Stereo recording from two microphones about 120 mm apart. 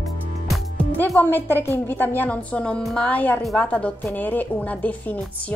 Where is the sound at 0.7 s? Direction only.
15° left (ahead or behind).